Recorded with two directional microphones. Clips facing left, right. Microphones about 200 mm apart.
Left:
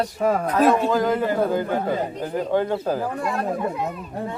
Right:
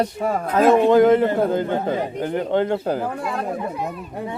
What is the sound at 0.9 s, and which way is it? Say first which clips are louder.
A man's voice: right 7 dB; 25° right (ahead or behind).